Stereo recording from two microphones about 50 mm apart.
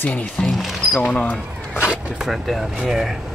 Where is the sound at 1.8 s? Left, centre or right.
Centre.